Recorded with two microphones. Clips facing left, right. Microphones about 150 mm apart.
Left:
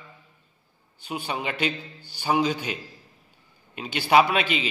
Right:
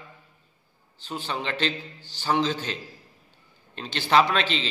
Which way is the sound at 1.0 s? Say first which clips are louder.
Left 1 dB; 10° left (ahead or behind).